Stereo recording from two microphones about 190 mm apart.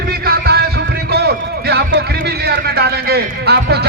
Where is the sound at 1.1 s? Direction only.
60° right (ahead or behind).